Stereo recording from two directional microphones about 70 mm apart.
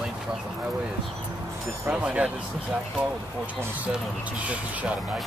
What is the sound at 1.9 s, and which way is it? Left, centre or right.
Speech, centre.